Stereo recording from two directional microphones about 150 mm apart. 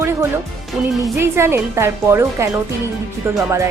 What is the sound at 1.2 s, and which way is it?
A woman's voice, 15° right (ahead or behind).